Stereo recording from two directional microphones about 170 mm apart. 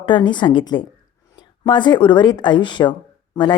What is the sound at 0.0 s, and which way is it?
A woman's voice, 25° left (ahead or behind).